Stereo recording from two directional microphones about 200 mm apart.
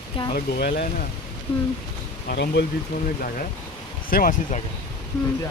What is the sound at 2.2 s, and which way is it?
Speech, 55° left (ahead or behind).